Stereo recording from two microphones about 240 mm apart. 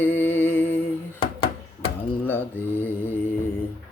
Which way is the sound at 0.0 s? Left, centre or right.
Centre.